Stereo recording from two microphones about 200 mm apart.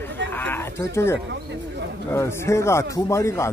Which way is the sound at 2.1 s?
15° left (ahead or behind).